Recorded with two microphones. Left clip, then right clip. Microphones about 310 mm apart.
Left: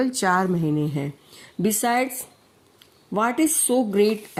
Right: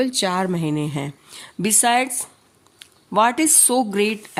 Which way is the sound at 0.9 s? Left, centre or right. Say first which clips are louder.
Right 1 dB; centre.